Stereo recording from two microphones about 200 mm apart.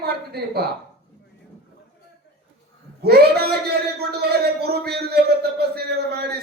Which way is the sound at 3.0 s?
50° right (ahead or behind).